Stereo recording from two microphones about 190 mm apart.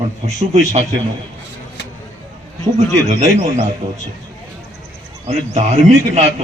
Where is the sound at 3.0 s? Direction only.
40° right (ahead or behind).